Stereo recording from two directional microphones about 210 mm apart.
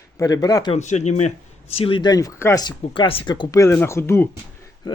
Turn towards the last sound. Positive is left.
turn(degrees=10)  # may be behind; listen again after turning